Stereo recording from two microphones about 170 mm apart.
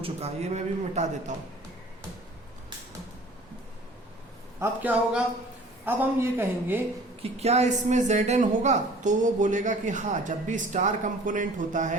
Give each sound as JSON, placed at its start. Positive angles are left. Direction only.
{"t": 0.0, "sound": "a man's voice", "side_deg": -40}
{"t": 4.6, "sound": "a woman's voice", "side_deg": -10}
{"t": 7.2, "sound": "a woman's voice", "side_deg": -40}